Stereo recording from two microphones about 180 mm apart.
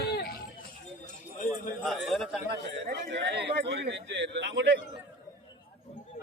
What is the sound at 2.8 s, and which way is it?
A man's voice, 60° right (ahead or behind).